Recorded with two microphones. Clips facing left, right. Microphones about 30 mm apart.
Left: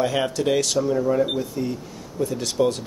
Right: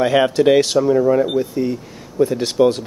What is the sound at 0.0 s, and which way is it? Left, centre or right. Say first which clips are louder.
Speech: right 8 dB; right.